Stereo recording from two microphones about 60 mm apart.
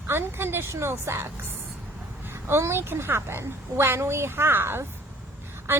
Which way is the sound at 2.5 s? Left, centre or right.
Right.